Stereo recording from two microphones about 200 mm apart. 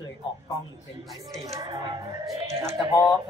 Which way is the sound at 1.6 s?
20° right (ahead or behind).